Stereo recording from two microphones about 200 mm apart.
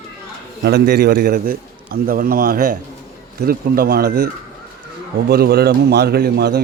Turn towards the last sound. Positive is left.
turn(degrees=-50)  # may be behind; listen again after turning